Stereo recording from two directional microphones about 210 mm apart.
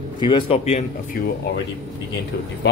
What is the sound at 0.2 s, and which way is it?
Speech, 25° left (ahead or behind).